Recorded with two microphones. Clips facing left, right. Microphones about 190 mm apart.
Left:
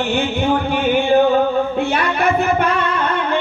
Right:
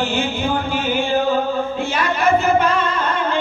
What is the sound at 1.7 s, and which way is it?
Singing, 60° left (ahead or behind).